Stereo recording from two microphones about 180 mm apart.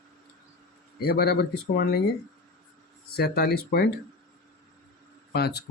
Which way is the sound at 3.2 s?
60° left (ahead or behind).